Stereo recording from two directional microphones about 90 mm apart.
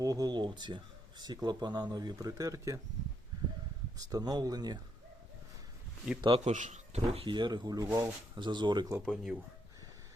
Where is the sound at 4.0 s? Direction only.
40° right (ahead or behind).